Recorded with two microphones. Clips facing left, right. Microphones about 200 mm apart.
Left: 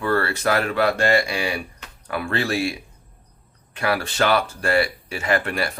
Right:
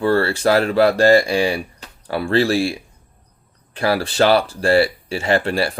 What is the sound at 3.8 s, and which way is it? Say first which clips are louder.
Speech: right 5 dB; 35° right (ahead or behind).